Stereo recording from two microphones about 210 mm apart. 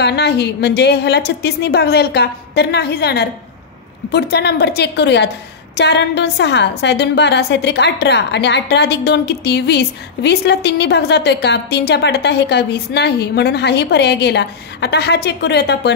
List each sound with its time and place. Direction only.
0.0 s a woman's voice: 50° left (ahead or behind)